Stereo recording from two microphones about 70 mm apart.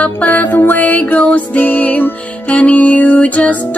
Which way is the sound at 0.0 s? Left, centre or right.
Left.